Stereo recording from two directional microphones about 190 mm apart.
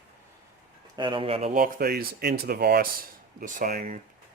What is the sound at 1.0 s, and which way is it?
Speech, 25° right (ahead or behind).